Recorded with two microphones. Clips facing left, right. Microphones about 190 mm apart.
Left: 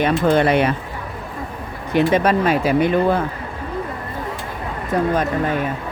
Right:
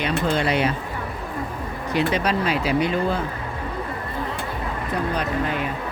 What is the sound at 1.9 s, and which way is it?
Speech, 55° left (ahead or behind).